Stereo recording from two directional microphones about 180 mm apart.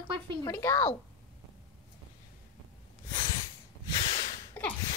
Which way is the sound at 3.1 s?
25° left (ahead or behind).